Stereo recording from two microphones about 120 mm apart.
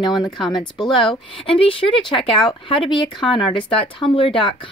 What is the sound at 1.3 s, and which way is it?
Speech, 50° left (ahead or behind).